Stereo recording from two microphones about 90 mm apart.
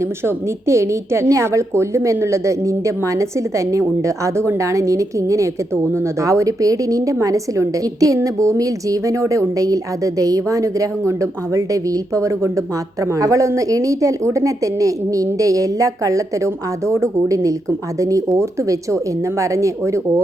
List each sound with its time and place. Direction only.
0.0 s a woman's voice: 30° right (ahead or behind)